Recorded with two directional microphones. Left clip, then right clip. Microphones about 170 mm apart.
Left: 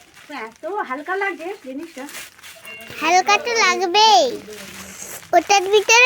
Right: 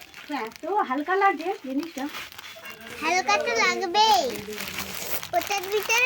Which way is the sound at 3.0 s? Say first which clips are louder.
Left 7 dB; 50° left (ahead or behind).